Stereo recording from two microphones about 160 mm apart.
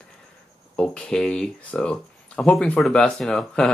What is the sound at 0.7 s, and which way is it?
Speech, 5° left (ahead or behind).